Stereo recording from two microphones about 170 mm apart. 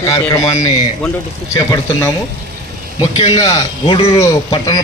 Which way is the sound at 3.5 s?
20° left (ahead or behind).